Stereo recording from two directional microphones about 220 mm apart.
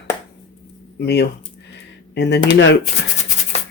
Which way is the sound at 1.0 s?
50° left (ahead or behind).